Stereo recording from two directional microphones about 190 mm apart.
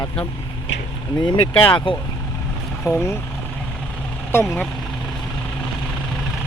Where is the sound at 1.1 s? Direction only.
25° left (ahead or behind).